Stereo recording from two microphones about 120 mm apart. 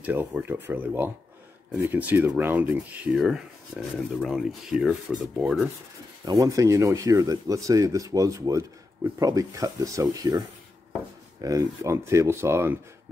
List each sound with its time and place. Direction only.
0.0 s speech: 15° right (ahead or behind)
6.2 s speech: 30° right (ahead or behind)
11.4 s speech: 25° right (ahead or behind)